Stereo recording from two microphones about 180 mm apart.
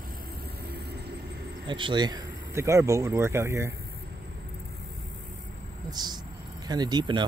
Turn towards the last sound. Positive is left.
turn(degrees=-25)  # may be behind; listen again after turning